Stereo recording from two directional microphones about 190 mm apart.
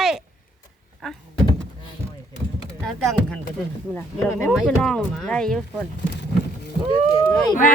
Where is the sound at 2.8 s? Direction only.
Centre (ahead or behind).